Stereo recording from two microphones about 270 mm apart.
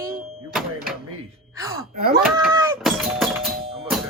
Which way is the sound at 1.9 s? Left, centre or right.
Right.